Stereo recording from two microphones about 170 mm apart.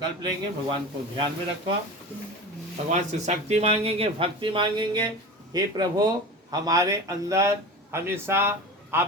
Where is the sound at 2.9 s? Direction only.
45° right (ahead or behind).